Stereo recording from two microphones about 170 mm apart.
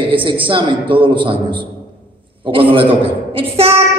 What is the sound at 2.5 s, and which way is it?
A woman's voice, 30° right (ahead or behind).